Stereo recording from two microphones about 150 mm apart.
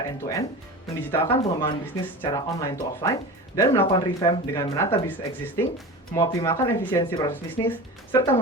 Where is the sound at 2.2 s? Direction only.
25° left (ahead or behind).